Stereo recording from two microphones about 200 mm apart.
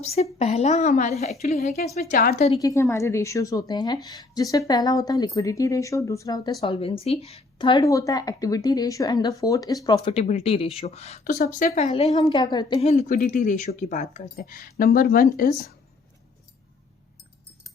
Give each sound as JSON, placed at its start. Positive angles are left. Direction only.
{"t": 0.0, "sound": "a woman's voice", "side_deg": 30}
{"t": 2.6, "sound": "a woman's voice", "side_deg": 20}
{"t": 11.9, "sound": "a woman's voice", "side_deg": 30}